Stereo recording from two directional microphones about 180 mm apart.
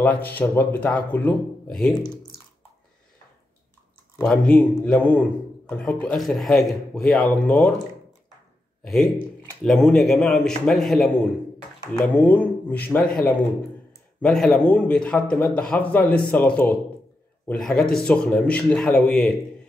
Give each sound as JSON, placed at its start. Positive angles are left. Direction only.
{"t": 0.0, "sound": "a man's voice", "side_deg": 10}
{"t": 4.2, "sound": "a man's voice", "side_deg": 5}
{"t": 9.6, "sound": "a man's voice", "side_deg": 5}